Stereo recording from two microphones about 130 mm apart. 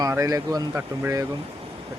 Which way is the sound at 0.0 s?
25° right (ahead or behind).